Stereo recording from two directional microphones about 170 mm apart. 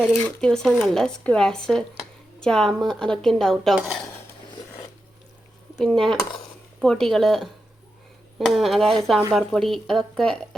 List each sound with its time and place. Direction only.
0.0 s speech: centre (ahead or behind)
5.7 s speech: centre (ahead or behind)